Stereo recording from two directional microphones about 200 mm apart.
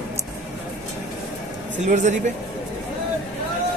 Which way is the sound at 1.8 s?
35° right (ahead or behind).